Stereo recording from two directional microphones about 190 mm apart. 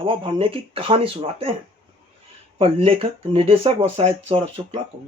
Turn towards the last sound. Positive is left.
turn(degrees=-30)  # may be behind; listen again after turning